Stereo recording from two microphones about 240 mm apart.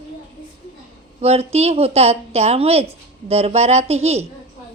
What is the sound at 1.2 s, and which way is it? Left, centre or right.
A woman's voice, right.